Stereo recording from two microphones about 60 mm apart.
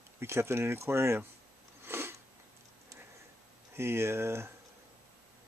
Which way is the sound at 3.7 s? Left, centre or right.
Right.